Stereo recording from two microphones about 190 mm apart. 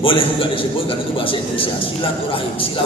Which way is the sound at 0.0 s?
30° left (ahead or behind).